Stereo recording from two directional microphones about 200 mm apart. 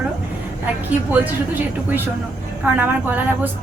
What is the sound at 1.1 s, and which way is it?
Speech, 10° right (ahead or behind).